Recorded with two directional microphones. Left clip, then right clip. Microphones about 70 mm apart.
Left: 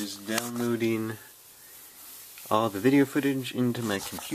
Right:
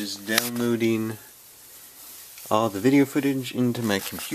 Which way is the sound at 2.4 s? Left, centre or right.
Right.